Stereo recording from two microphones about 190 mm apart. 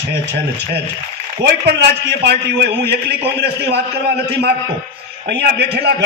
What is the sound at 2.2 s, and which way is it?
A man's voice, 60° right (ahead or behind).